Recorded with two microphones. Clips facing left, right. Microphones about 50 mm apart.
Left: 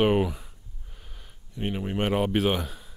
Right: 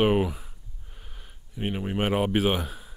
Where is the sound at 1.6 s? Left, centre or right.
Centre.